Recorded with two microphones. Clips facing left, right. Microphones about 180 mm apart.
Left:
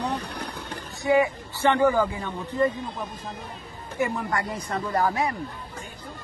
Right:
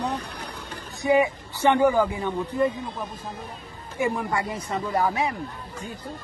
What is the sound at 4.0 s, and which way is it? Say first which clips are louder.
A man's voice: right 1 dB; 10° right (ahead or behind).